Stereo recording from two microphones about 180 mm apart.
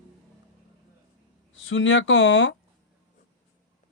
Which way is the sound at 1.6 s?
90° left.